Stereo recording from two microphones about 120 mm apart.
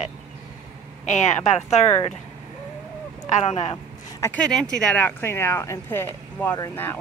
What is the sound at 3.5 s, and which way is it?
Speech, 55° left (ahead or behind).